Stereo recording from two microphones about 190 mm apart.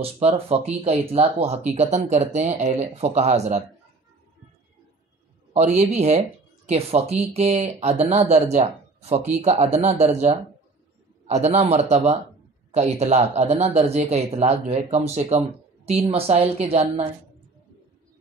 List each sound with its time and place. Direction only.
0.0 s speech: 30° right (ahead or behind)
5.8 s speech: 35° right (ahead or behind)